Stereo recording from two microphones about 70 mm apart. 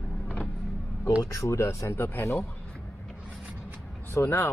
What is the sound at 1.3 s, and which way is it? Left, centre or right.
Speech, left.